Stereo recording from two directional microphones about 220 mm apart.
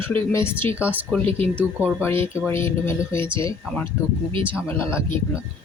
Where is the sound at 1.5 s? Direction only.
5° right (ahead or behind).